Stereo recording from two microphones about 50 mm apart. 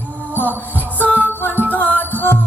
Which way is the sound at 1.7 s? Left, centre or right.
Left.